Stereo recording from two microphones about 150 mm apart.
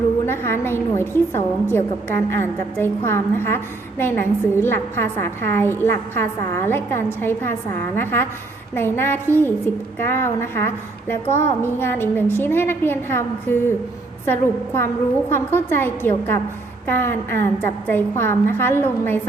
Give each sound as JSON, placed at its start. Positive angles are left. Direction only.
{"t": 0.3, "sound": "a woman's voice", "side_deg": 15}